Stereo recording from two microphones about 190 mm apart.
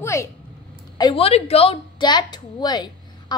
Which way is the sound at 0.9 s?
25° left (ahead or behind).